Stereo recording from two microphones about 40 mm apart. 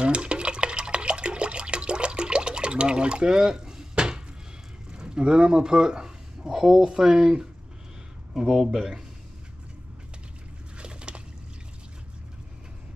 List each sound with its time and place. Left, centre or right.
0.0 s water: right
4.9 s speech: right; by 9.0 s centre
10.8 s a sound: right